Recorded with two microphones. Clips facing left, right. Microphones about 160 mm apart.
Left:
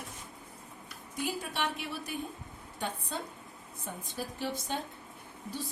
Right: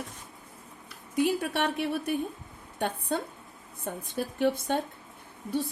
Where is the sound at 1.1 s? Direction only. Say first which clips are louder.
Right 9 dB; 65° right (ahead or behind).